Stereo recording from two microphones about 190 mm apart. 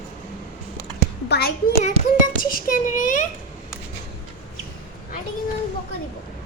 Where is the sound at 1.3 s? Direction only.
55° left (ahead or behind).